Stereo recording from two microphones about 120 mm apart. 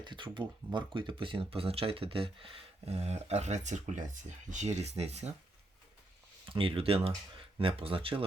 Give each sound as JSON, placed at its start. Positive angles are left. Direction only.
{"t": 0.0, "sound": "speech", "side_deg": -40}
{"t": 6.5, "sound": "speech", "side_deg": -50}